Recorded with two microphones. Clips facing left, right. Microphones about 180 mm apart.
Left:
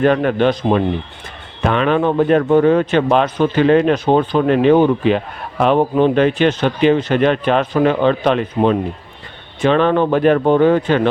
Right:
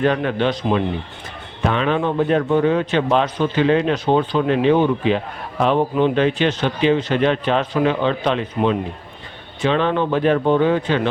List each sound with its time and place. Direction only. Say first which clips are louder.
0.0 s speech: left 5 dB; 50° left (ahead or behind)
1.6 s speech: left 4 dB; 60° left (ahead or behind)